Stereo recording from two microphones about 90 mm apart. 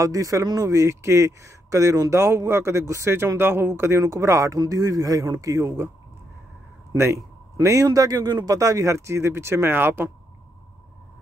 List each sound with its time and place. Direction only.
0.0 s speech: 40° right (ahead or behind)
6.9 s speech: 35° right (ahead or behind)